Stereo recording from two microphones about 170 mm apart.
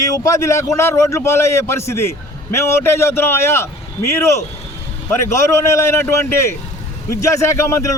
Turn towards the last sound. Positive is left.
turn(degrees=15)  # may be behind; listen again after turning